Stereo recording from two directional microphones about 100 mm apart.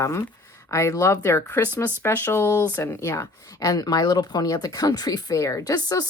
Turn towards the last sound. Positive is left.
turn(degrees=35)  # may be behind; listen again after turning